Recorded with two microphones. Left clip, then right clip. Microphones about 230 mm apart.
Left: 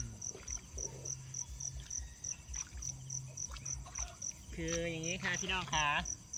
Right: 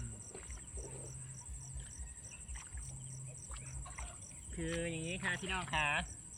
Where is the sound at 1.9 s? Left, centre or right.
Centre.